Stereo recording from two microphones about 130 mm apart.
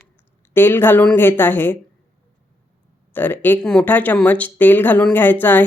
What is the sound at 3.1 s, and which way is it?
Speech, 15° left (ahead or behind).